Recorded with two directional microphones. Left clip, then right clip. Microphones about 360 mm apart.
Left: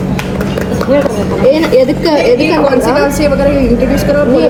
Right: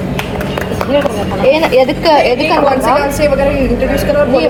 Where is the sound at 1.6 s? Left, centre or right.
Centre.